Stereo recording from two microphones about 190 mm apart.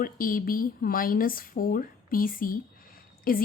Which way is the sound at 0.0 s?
50° left (ahead or behind).